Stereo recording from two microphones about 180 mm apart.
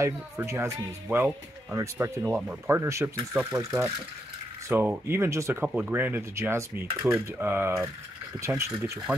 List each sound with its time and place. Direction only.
0.0 s speech: 15° right (ahead or behind)